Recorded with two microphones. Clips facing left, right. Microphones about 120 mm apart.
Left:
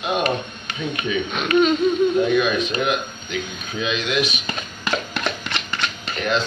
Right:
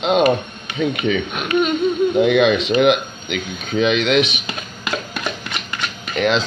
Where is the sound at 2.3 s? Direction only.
80° right.